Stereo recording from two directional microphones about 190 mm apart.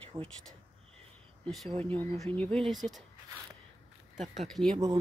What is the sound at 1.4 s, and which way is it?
Speech, centre (ahead or behind).